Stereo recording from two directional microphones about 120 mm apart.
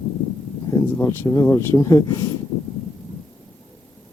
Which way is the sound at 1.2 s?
25° left (ahead or behind).